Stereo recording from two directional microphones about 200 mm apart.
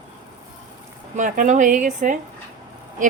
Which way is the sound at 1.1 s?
40° right (ahead or behind).